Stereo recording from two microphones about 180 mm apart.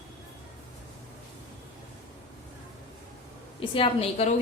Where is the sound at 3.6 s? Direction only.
30° left (ahead or behind).